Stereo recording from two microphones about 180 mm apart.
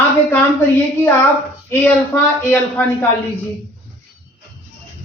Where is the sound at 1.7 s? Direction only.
10° left (ahead or behind).